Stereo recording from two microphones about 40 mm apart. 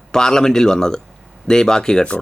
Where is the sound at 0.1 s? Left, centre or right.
Centre.